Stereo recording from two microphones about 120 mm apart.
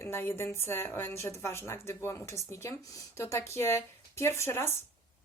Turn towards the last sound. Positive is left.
turn(degrees=20)  # may be behind; listen again after turning